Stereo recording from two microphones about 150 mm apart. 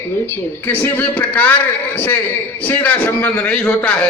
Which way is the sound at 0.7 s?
15° left (ahead or behind).